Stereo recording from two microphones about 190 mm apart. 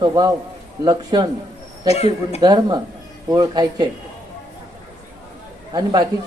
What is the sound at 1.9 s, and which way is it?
Speech, 35° left (ahead or behind).